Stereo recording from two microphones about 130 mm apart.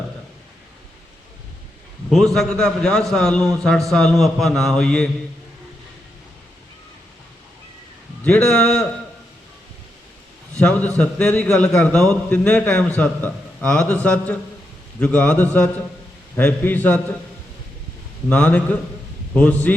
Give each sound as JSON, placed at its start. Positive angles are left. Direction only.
{"t": 2.0, "sound": "a man's voice", "side_deg": 0}
{"t": 8.2, "sound": "a man's voice", "side_deg": 15}
{"t": 10.6, "sound": "a man's voice", "side_deg": 10}
{"t": 18.3, "sound": "a man's voice", "side_deg": 10}